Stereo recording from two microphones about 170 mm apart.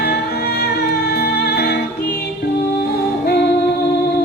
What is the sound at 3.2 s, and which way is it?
Singing, 70° left (ahead or behind).